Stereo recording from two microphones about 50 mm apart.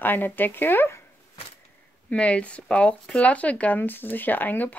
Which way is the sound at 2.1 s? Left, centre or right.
Left.